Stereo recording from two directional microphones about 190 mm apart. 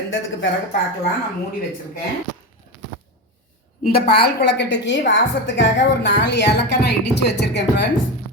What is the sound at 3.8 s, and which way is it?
A woman's voice, 55° left (ahead or behind).